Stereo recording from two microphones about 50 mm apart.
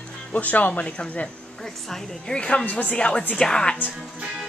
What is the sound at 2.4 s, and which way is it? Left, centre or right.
Speech, left.